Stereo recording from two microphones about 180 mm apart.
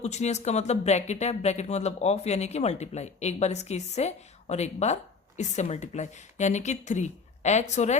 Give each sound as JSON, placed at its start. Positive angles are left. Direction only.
{"t": 0.0, "sound": "speech", "side_deg": 40}